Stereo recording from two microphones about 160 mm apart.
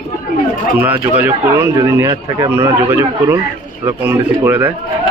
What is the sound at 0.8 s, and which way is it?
Speech, 10° right (ahead or behind).